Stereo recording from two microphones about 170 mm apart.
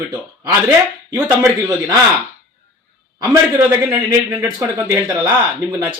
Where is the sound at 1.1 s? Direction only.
10° right (ahead or behind).